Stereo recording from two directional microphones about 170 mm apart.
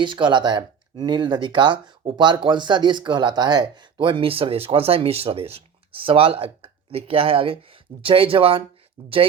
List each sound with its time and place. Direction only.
0.0 s speech: 30° right (ahead or behind)